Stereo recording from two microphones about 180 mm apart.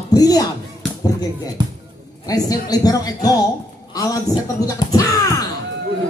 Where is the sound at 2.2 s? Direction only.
20° left (ahead or behind).